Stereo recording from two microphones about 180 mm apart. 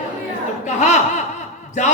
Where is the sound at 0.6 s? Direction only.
40° left (ahead or behind).